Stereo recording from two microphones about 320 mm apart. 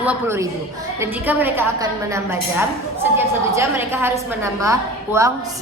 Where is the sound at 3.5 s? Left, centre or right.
Centre.